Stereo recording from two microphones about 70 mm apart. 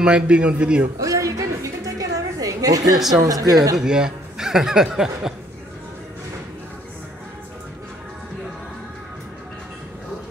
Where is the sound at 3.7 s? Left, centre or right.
Centre.